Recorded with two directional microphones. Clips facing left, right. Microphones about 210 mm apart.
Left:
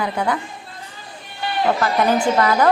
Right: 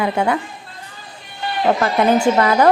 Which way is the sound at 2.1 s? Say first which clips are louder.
Right 3 dB; 25° right (ahead or behind).